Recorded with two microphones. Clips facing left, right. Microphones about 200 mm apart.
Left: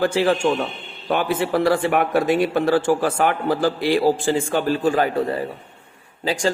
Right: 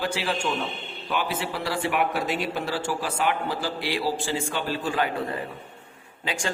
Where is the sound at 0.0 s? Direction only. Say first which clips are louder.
Left 9 dB; 50° left (ahead or behind).